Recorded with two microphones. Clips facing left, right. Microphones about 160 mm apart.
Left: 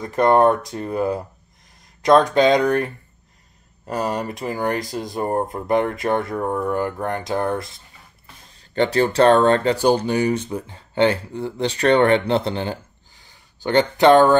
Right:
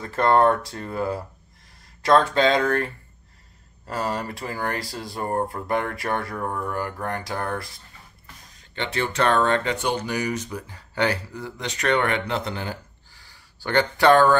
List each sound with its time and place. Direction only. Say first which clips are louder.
0.0 s speech: left 3 dB; 15° left (ahead or behind)
8.5 s speech: left 11 dB; 35° left (ahead or behind); by 14.3 s 20° left (ahead or behind)